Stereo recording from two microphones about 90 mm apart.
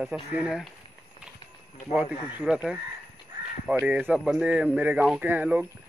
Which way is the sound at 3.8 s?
20° right (ahead or behind).